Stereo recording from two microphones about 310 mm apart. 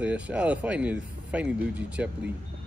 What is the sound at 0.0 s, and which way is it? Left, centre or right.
Speech, centre.